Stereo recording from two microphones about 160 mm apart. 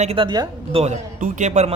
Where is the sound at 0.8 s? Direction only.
50° right (ahead or behind).